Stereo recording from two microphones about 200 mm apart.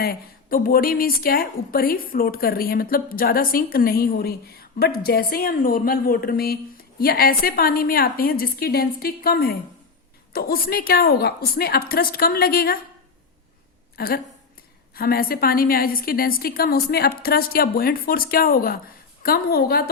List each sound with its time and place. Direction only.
0.0 s a woman's voice: 50° left (ahead or behind)
13.9 s a woman's voice: 50° left (ahead or behind)